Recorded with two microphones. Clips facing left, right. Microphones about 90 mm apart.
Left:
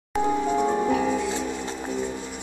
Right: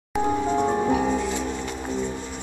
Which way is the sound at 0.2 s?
10° right (ahead or behind).